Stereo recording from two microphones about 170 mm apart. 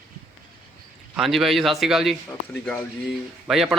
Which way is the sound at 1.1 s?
Centre (ahead or behind).